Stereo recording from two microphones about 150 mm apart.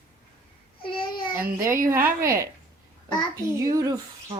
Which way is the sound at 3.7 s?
20° right (ahead or behind).